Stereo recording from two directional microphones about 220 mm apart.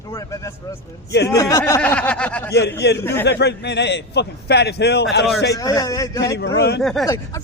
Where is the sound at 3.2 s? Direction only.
50° left (ahead or behind).